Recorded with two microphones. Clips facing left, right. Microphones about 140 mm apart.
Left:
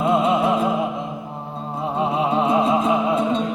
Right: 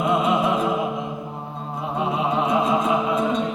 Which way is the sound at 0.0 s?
30° left (ahead or behind).